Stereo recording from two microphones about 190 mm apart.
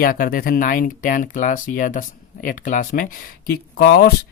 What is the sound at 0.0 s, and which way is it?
Speech, 50° left (ahead or behind).